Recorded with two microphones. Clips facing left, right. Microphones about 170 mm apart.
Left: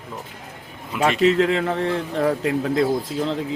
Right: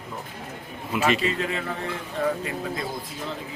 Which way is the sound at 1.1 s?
90° left.